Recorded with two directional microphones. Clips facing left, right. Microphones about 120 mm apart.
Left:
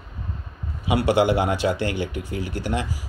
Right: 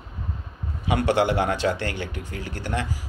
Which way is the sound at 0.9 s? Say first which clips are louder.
Left 2 dB; 10° left (ahead or behind).